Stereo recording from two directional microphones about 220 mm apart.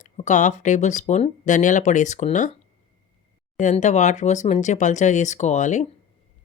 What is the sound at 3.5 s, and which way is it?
Speech, 35° left (ahead or behind).